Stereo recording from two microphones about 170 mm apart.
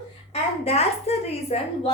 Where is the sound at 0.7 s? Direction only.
35° left (ahead or behind).